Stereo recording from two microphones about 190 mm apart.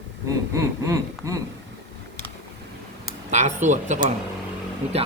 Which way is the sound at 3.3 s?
40° right (ahead or behind).